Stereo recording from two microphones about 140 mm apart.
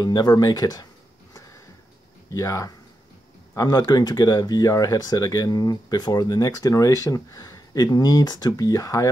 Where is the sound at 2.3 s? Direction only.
20° left (ahead or behind).